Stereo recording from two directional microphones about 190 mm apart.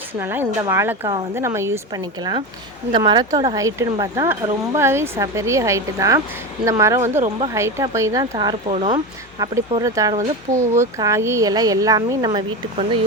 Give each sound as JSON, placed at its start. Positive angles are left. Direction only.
{"t": 0.2, "sound": "speech", "side_deg": -10}
{"t": 9.4, "sound": "speech", "side_deg": -20}